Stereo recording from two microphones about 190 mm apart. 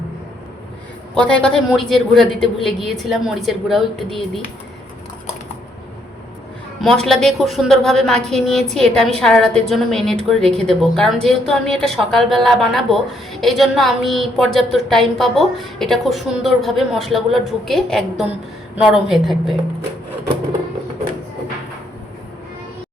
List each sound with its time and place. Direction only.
1.1 s a woman's voice: 5° left (ahead or behind)
6.8 s a woman's voice: centre (ahead or behind)